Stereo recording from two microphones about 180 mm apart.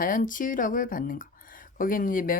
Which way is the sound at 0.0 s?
50° left (ahead or behind).